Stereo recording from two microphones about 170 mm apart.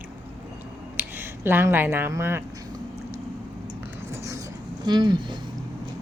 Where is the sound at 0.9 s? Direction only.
10° right (ahead or behind).